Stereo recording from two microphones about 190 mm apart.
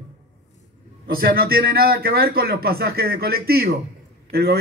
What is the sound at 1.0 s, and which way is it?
A man's voice, 50° right (ahead or behind).